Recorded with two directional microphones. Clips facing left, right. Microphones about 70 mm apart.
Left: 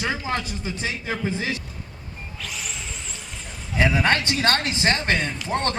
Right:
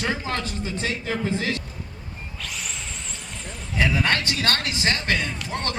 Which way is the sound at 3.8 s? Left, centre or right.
Left.